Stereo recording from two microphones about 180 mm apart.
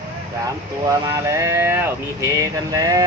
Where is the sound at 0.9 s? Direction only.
15° right (ahead or behind).